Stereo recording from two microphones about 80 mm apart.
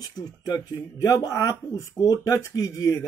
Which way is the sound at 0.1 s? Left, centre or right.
Left.